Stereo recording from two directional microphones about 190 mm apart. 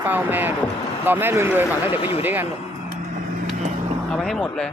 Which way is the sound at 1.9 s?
30° left (ahead or behind).